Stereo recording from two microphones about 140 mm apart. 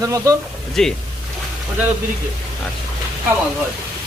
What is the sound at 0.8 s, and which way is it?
Speech, 5° left (ahead or behind).